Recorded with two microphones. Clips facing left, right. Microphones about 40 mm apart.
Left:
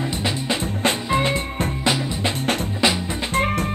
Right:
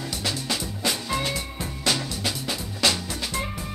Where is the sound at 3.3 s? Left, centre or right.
Left.